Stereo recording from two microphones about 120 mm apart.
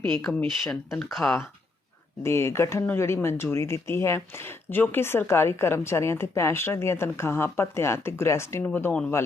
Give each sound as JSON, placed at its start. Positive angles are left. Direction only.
{"t": 0.3, "sound": "speech", "side_deg": 0}
{"t": 2.2, "sound": "speech", "side_deg": 20}